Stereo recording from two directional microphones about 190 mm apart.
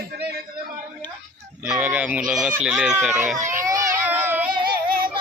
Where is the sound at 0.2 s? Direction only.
55° right (ahead or behind).